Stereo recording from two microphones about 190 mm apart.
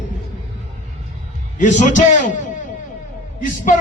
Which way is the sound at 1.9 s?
40° left (ahead or behind).